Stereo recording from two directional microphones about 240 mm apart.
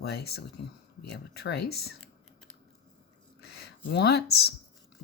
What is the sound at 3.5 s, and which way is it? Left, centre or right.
Speech, left.